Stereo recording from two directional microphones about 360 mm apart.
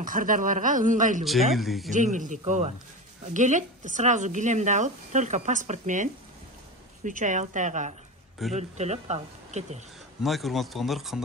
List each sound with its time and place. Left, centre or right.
0.0 s speech: right
1.2 s speech: centre
1.9 s speech: right
7.1 s speech: right
10.2 s speech: centre